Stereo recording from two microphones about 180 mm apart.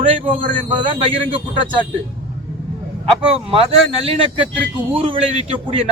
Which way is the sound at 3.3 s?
30° right (ahead or behind).